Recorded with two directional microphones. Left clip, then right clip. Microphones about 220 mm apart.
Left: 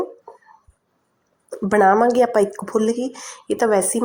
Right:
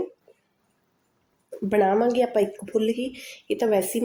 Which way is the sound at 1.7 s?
15° left (ahead or behind).